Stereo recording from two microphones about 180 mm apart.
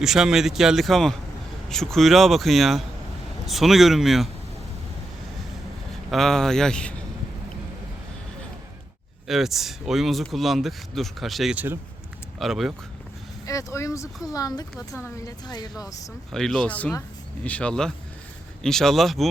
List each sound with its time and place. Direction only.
0.0 s speech: centre (ahead or behind)
6.1 s speech: centre (ahead or behind)
9.2 s speech: centre (ahead or behind)
13.4 s a woman's voice: 15° left (ahead or behind)
16.3 s speech: 5° left (ahead or behind)